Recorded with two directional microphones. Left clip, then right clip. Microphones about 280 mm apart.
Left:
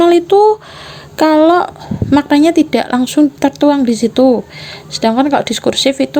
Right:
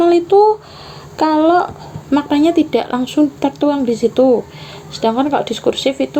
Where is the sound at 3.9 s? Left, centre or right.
Left.